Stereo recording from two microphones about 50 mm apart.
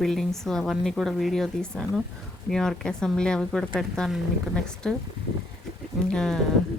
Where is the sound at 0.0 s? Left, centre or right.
Centre.